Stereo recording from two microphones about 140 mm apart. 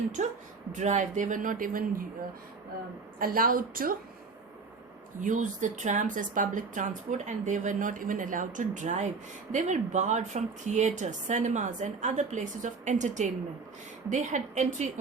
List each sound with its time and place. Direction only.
0.2 s a woman's voice: 60° right (ahead or behind); by 2.0 s 90° right
3.2 s a woman's voice: 90° right
5.2 s speech: 65° right (ahead or behind)